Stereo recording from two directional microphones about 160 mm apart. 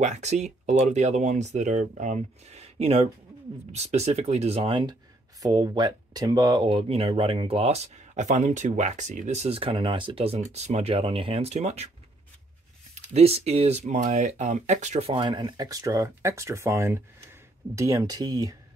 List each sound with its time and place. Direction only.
0.0 s speech: 45° right (ahead or behind)
12.9 s speech: 40° right (ahead or behind); by 18.6 s 25° right (ahead or behind)